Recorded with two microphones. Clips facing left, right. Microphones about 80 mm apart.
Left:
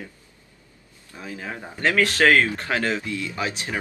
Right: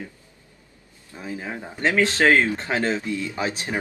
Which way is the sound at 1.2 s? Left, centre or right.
Right.